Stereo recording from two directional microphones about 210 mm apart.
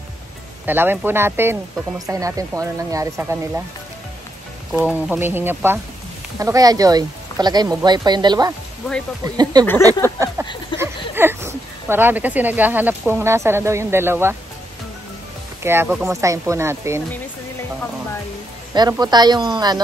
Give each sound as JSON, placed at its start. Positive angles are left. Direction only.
{"t": 0.7, "sound": "speech", "side_deg": -10}
{"t": 4.7, "sound": "speech", "side_deg": -5}
{"t": 10.1, "sound": "a sound", "side_deg": -15}
{"t": 10.7, "sound": "a sound", "side_deg": 25}
{"t": 11.1, "sound": "speech", "side_deg": -10}
{"t": 15.6, "sound": "speech", "side_deg": -10}
{"t": 18.7, "sound": "speech", "side_deg": -20}